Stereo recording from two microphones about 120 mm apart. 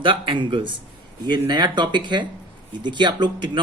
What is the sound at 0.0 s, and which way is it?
A man's voice, 45° right (ahead or behind).